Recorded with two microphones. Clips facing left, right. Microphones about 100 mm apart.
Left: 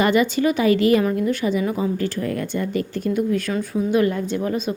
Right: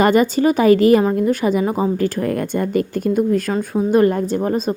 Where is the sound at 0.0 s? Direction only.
45° right (ahead or behind).